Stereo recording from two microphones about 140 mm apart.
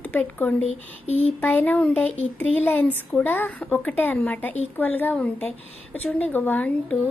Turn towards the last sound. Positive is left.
turn(degrees=10)  # may be behind; listen again after turning